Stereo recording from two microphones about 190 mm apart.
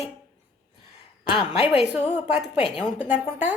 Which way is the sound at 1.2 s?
25° left (ahead or behind).